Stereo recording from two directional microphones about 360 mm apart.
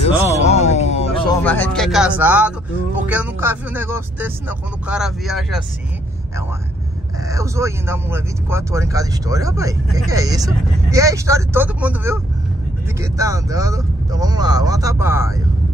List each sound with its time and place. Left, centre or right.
0.3 s a sound: centre
1.4 s speech: centre
7.2 s speech: centre